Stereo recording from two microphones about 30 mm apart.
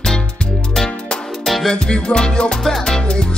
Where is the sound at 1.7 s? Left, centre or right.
Left.